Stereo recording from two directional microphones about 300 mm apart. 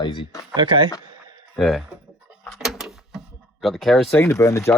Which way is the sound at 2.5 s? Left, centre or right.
Centre.